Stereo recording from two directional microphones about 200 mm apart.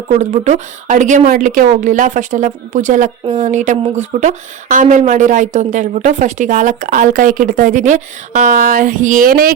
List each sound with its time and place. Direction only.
0.2 s a woman's voice: 35° right (ahead or behind)